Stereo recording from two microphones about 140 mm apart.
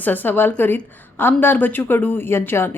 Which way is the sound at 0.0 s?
15° left (ahead or behind).